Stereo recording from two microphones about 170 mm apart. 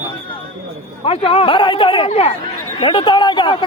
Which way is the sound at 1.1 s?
35° left (ahead or behind).